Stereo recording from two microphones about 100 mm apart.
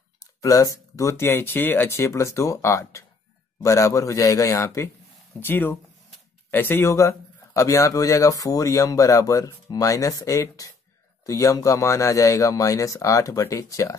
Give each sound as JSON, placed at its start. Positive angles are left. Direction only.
{"t": 0.2, "sound": "speech", "side_deg": 35}